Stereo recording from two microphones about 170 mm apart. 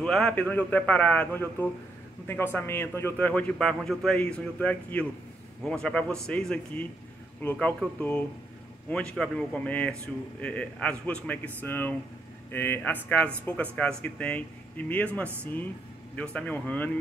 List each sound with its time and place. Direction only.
0.0 s a man's voice: 5° left (ahead or behind)